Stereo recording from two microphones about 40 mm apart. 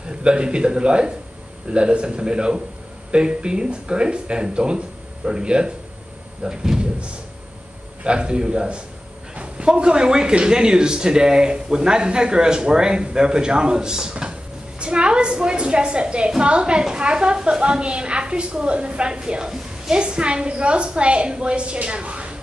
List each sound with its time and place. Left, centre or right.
0.2 s a woman's voice: right
8.0 s a woman's voice: right